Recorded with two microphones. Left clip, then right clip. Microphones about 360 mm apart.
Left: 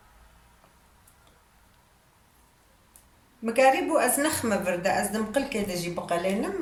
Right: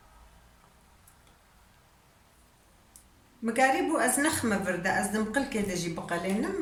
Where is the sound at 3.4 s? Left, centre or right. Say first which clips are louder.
Left 4 dB; centre.